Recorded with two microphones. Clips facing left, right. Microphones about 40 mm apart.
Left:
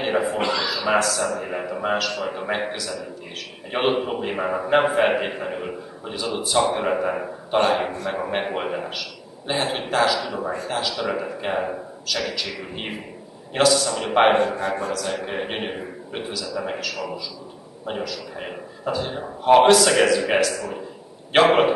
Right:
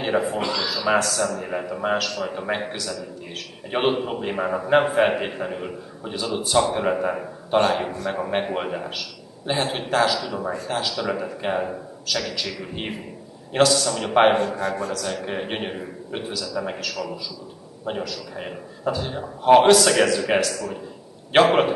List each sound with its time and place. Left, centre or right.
0.0 s a man's voice: centre
3.9 s a man's voice: centre
14.3 s a man's voice: centre